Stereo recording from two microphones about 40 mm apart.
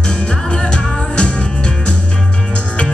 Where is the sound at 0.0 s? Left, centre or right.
Left.